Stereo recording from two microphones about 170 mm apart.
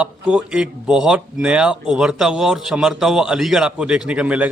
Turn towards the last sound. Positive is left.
turn(degrees=-10)  # may be behind; listen again after turning